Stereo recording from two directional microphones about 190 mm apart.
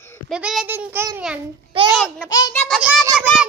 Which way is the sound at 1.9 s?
Centre (ahead or behind).